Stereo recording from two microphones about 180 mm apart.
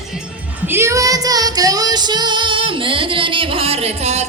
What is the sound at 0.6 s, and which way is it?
Female singing, 15° right (ahead or behind).